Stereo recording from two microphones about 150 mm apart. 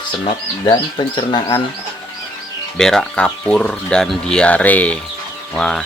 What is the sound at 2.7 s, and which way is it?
Speech, 5° left (ahead or behind).